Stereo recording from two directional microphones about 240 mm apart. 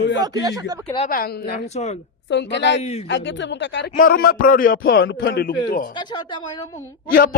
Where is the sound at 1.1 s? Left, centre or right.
Left.